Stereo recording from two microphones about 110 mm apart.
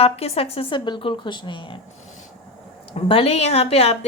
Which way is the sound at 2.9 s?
60° left (ahead or behind).